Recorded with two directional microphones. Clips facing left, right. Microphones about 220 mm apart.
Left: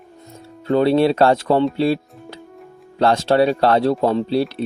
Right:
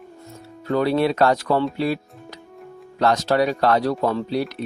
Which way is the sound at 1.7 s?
30° left (ahead or behind).